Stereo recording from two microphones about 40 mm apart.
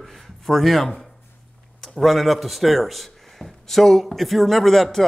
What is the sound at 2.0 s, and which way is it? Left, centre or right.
Speech, centre.